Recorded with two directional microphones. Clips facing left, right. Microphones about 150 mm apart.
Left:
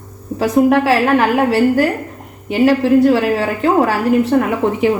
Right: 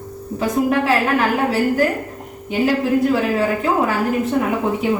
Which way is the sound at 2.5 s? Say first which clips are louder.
Left 6 dB; 75° left (ahead or behind).